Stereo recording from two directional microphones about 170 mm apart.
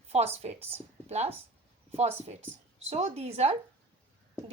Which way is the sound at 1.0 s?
40° right (ahead or behind).